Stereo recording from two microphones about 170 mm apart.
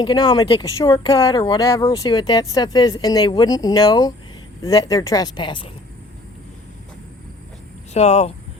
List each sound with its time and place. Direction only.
0.0 s speech: 25° left (ahead or behind)
7.9 s speech: 40° left (ahead or behind)